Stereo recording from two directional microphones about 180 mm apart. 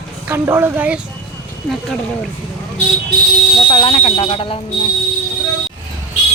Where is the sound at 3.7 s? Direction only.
30° left (ahead or behind).